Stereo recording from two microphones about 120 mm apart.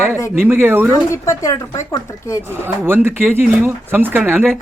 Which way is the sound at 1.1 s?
25° left (ahead or behind).